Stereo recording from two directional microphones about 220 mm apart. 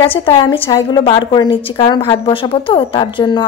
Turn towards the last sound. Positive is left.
turn(degrees=20)  # may be behind; listen again after turning